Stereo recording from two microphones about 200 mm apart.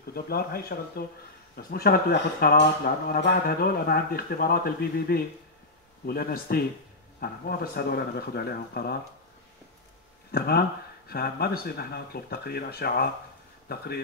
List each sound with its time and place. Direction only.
0.0 s speech: 50° left (ahead or behind)
10.3 s speech: 50° left (ahead or behind)